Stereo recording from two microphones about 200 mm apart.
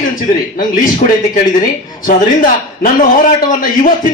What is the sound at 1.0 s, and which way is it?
Speech, 40° left (ahead or behind).